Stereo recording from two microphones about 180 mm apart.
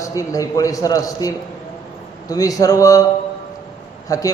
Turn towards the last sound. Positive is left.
turn(degrees=20)  # may be behind; listen again after turning